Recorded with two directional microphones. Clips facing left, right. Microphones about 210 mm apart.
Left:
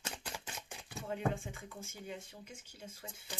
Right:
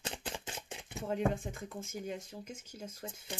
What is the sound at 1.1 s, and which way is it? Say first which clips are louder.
Speech: right 4 dB; 40° right (ahead or behind).